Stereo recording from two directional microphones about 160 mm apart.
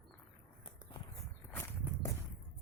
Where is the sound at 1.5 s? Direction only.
15° left (ahead or behind).